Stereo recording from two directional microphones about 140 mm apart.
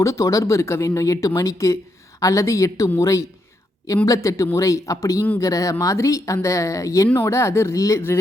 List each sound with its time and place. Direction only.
0.0 s speech: 20° left (ahead or behind)
5.2 s speech: 15° left (ahead or behind)